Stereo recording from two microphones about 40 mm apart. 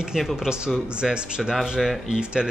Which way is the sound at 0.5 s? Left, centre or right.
Centre.